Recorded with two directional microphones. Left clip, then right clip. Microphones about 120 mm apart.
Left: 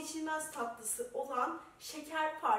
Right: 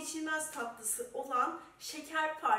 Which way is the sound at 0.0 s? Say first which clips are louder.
Right 2 dB; centre (ahead or behind).